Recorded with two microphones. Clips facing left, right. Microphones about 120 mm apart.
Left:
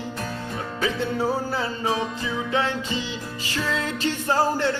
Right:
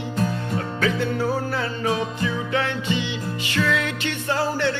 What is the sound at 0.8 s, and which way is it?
Music, 25° left (ahead or behind).